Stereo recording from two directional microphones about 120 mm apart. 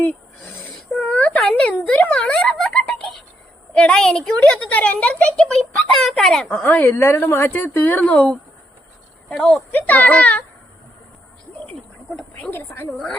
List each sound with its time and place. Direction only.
0.7 s a sound: centre (ahead or behind)
1.0 s a sound: 10° left (ahead or behind)
1.4 s speech: 10° left (ahead or behind)
6.6 s speech: 15° left (ahead or behind)
9.7 s speech: 15° left (ahead or behind)
11.7 s frog: 15° left (ahead or behind)